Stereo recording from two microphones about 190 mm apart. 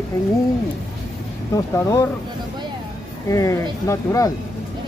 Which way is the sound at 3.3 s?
15° left (ahead or behind).